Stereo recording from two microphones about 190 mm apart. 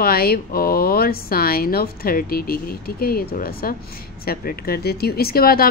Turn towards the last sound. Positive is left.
turn(degrees=50)  # may be behind; listen again after turning